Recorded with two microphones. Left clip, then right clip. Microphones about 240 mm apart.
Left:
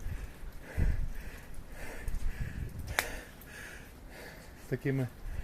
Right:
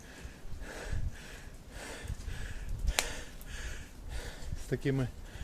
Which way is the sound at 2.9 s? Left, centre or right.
Centre.